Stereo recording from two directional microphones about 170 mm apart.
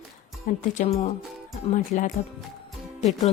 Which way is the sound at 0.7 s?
40° left (ahead or behind).